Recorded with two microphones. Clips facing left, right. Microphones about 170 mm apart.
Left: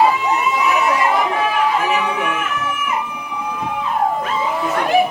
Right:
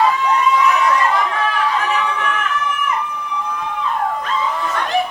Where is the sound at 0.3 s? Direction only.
25° left (ahead or behind).